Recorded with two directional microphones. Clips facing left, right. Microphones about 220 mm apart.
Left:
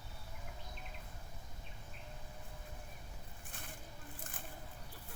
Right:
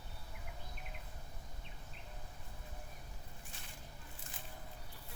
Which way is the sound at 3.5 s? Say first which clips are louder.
Left 3 dB; 55° left (ahead or behind).